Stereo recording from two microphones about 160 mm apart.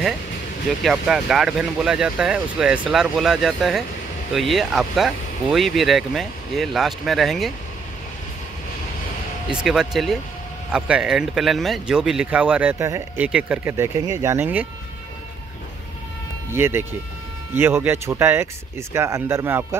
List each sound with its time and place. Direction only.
0.8 s speech: 5° right (ahead or behind)
9.5 s speech: 5° right (ahead or behind)
16.5 s speech: 15° right (ahead or behind)